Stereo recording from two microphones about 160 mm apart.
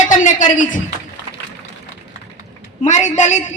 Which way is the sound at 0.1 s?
55° left (ahead or behind).